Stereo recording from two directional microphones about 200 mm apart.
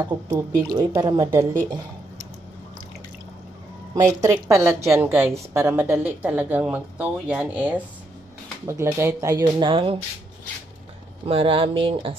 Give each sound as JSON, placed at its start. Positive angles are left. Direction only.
{"t": 0.3, "sound": "a woman's voice", "side_deg": -15}
{"t": 3.9, "sound": "a woman's voice", "side_deg": -15}
{"t": 11.2, "sound": "speech", "side_deg": -25}